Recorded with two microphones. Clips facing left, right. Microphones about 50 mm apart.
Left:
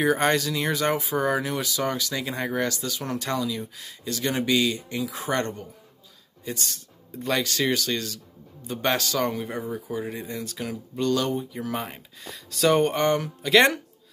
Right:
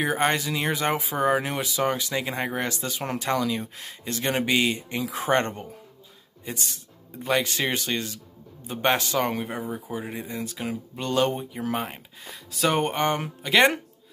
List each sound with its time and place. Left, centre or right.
0.0 s speech: centre; by 3.2 s right
3.3 s speech: right
6.4 s speech: right
10.7 s speech: right
11.8 s speech: centre